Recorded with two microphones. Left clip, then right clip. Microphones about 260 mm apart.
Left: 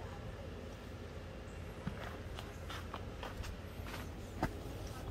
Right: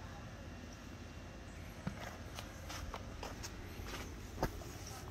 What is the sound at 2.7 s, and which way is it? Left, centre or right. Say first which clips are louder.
Vehicle: left 1 dB; right.